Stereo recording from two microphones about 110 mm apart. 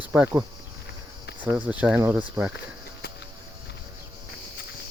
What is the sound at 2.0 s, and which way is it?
Speech, 20° right (ahead or behind).